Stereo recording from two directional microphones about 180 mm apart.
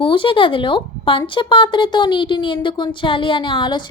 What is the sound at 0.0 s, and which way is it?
A woman's voice, 30° left (ahead or behind).